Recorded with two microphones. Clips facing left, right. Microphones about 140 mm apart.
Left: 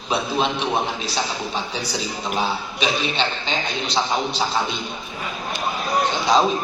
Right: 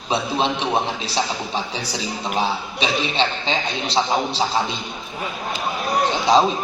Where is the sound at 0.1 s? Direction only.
30° right (ahead or behind).